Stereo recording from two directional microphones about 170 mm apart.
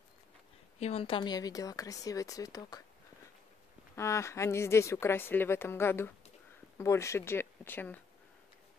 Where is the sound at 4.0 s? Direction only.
15° left (ahead or behind).